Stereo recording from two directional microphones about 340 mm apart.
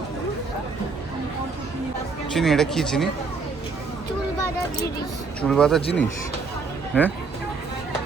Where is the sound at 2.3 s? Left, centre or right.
Centre.